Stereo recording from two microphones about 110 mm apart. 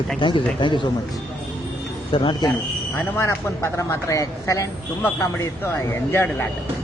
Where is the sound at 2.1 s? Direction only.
45° left (ahead or behind).